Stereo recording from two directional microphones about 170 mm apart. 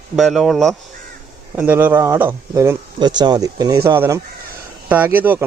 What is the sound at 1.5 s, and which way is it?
Speech, 10° right (ahead or behind).